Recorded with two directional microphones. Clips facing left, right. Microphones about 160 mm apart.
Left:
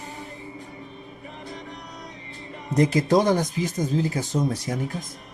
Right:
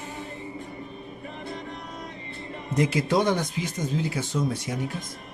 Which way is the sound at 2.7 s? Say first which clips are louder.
Left 4 dB; 40° left (ahead or behind).